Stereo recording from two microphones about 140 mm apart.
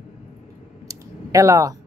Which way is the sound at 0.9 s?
20° right (ahead or behind).